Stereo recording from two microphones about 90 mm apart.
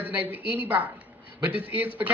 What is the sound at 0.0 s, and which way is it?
A woman's voice, 20° right (ahead or behind).